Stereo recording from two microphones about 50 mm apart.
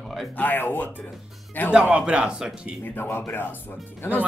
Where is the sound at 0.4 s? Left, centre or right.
Left.